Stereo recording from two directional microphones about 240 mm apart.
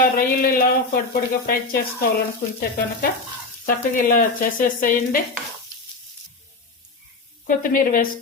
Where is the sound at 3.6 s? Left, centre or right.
Left.